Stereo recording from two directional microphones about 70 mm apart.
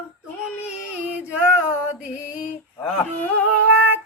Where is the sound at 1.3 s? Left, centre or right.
Centre.